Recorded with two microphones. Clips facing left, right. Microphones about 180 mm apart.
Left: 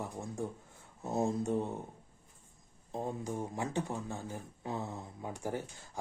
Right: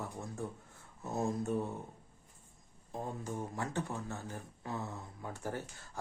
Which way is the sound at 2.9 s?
20° left (ahead or behind).